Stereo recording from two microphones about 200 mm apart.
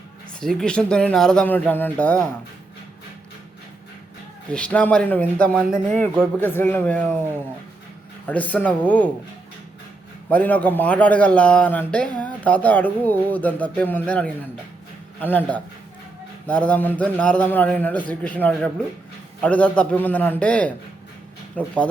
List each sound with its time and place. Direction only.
0.3 s speech: 5° left (ahead or behind)
4.5 s speech: 5° left (ahead or behind)
6.4 s speech: 10° left (ahead or behind)
8.3 s speech: 5° left (ahead or behind)
10.2 s speech: 10° left (ahead or behind)